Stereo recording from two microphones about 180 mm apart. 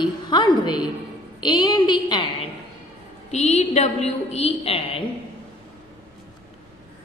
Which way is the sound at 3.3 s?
40° left (ahead or behind).